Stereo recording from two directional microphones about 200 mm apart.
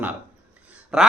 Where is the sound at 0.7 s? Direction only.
5° right (ahead or behind).